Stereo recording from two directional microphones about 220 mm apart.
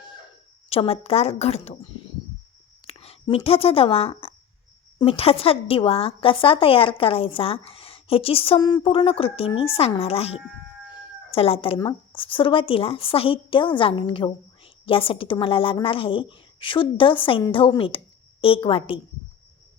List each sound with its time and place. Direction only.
0.0 s chicken: 20° left (ahead or behind)
0.7 s speech: 25° left (ahead or behind)